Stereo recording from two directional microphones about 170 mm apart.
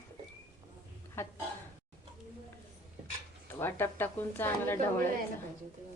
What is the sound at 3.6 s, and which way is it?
A woman's voice, 15° left (ahead or behind).